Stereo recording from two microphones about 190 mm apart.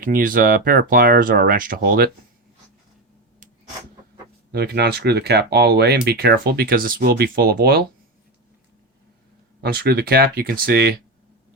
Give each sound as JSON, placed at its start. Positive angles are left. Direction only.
{"t": 0.0, "sound": "speech", "side_deg": -45}
{"t": 4.5, "sound": "speech", "side_deg": -60}
{"t": 9.6, "sound": "speech", "side_deg": -55}